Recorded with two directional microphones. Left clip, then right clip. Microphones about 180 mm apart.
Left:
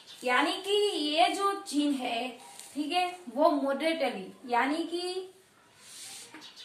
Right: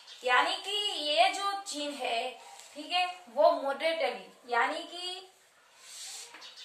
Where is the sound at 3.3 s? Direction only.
10° right (ahead or behind).